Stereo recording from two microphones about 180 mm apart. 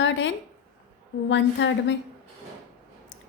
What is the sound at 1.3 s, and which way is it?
Speech, 90° left.